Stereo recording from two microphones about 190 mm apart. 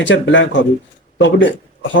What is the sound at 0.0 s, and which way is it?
Speech, 75° left (ahead or behind).